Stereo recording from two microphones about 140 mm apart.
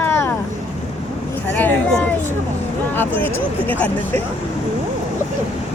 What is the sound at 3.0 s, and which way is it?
Speech, 15° left (ahead or behind).